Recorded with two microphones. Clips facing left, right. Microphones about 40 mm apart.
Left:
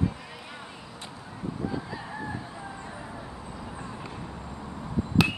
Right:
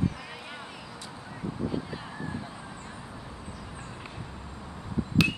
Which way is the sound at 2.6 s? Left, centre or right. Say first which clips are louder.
Left 3 dB; centre.